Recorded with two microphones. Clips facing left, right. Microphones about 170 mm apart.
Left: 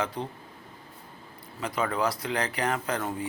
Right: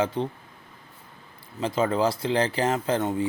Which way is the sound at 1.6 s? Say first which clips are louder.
Right 5 dB; 25° right (ahead or behind).